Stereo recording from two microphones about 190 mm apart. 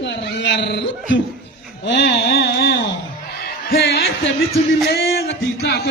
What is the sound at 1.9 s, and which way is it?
A man's voice, 70° left (ahead or behind).